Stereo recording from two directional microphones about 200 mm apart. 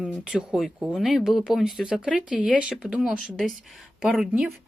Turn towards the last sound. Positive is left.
turn(degrees=0)  # may be behind; listen again after turning